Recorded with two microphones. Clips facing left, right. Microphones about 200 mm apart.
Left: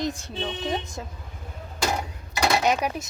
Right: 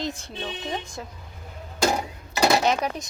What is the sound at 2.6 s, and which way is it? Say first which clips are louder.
Speech: even; 10° left (ahead or behind).